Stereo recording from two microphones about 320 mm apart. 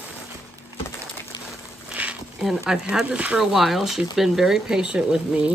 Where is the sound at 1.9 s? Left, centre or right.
Centre.